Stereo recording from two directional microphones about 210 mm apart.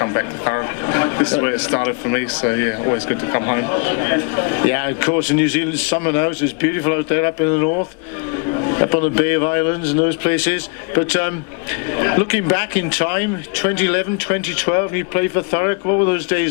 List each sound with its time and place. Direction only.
0.0 s speech: 20° left (ahead or behind)